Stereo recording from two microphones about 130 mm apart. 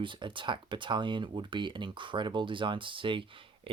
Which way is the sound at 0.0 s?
40° right (ahead or behind).